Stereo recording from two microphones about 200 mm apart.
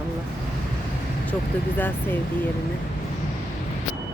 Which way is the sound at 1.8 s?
10° left (ahead or behind).